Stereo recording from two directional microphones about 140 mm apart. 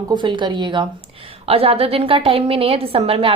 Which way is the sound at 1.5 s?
45° right (ahead or behind).